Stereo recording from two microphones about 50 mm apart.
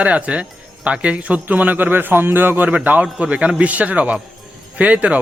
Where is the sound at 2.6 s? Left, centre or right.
Right.